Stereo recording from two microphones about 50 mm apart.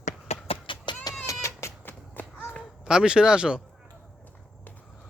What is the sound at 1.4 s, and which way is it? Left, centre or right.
Sheep, left.